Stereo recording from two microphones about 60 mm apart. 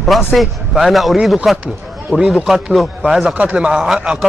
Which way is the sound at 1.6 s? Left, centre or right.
Right.